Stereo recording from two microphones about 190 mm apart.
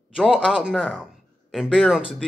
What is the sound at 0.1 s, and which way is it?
A man's voice, 5° right (ahead or behind).